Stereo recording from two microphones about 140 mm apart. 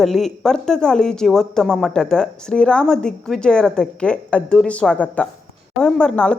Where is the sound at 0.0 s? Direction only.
Centre (ahead or behind).